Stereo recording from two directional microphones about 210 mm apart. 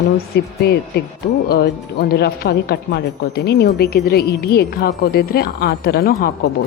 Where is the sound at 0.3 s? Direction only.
50° left (ahead or behind).